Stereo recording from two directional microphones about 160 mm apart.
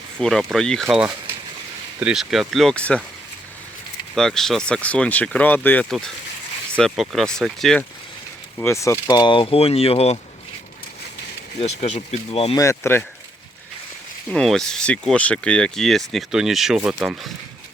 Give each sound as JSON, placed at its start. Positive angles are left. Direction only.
{"t": 0.2, "sound": "speech", "side_deg": 0}
{"t": 4.1, "sound": "speech", "side_deg": 0}
{"t": 8.5, "sound": "speech", "side_deg": 15}
{"t": 11.6, "sound": "speech", "side_deg": 45}
{"t": 12.5, "sound": "speech", "side_deg": 20}
{"t": 14.3, "sound": "speech", "side_deg": 5}